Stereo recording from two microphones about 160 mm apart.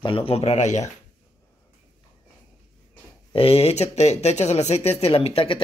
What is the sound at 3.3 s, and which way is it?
Speech, 40° left (ahead or behind).